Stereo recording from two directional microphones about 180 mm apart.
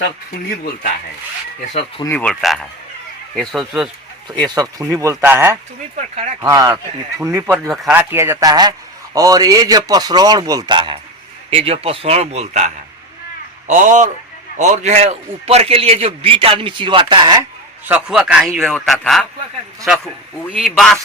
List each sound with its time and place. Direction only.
0.6 s speech: 55° left (ahead or behind)
2.0 s a man's voice: 5° left (ahead or behind)
4.4 s speech: 20° right (ahead or behind)
6.0 s a man's voice: 40° right (ahead or behind)
6.4 s speech: 20° right (ahead or behind)
7.7 s a man's voice: centre (ahead or behind)
7.9 s a man's voice: 15° right (ahead or behind)
17.8 s a man's voice: 5° right (ahead or behind)
20.6 s a man's voice: centre (ahead or behind)